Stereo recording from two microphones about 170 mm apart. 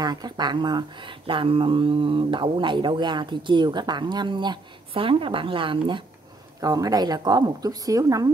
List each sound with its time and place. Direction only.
0.0 s speech: 25° right (ahead or behind)